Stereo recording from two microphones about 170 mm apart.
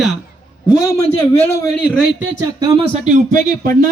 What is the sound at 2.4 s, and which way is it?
Speech, 20° right (ahead or behind).